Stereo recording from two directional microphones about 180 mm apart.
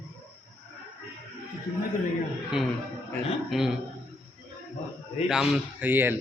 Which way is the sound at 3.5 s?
Centre (ahead or behind).